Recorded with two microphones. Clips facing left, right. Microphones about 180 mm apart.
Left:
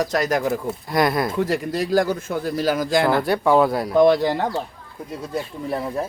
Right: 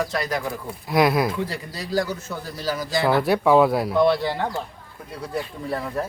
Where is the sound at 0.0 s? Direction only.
45° left (ahead or behind).